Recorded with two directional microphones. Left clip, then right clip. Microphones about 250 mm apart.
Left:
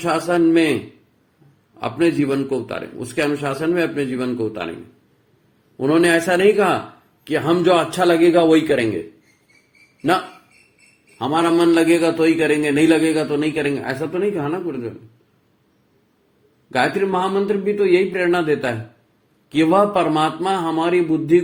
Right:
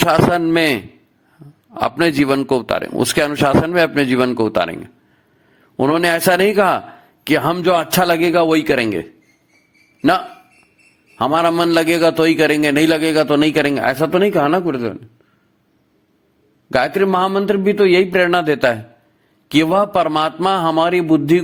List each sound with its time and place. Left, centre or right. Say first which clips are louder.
0.1 s a man's voice: left 3 dB; right
1.7 s a man's voice: right 3 dB; right
5.7 s a man's voice: right 1 dB; right
11.2 s a man's voice: right 2 dB; right
16.6 s a man's voice: right 3 dB; right